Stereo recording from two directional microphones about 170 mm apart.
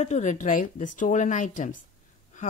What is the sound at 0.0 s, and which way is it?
A woman's voice, 45° left (ahead or behind).